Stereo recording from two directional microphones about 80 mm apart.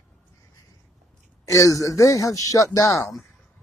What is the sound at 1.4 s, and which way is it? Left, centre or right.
Speech, left.